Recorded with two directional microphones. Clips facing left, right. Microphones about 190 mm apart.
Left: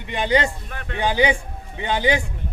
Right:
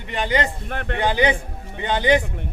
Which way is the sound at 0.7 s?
65° right (ahead or behind).